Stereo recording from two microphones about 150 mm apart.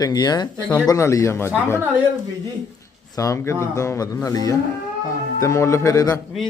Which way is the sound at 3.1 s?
20° left (ahead or behind).